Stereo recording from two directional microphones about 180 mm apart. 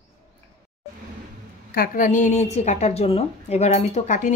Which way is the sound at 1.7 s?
50° left (ahead or behind).